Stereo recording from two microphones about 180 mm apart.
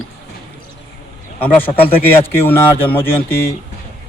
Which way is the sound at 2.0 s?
10° left (ahead or behind).